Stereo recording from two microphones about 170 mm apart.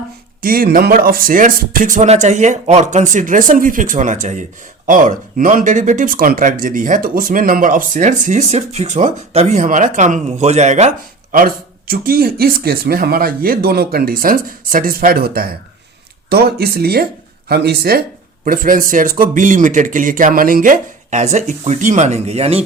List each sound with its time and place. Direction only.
0.4 s speech: 60° right (ahead or behind)
18.4 s speech: 55° right (ahead or behind); by 22.6 s 35° right (ahead or behind)